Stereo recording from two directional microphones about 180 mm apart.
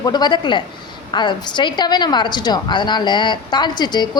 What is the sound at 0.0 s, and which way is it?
A woman's voice, 25° left (ahead or behind).